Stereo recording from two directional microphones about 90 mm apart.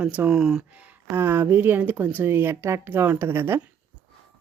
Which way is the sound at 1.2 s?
25° right (ahead or behind).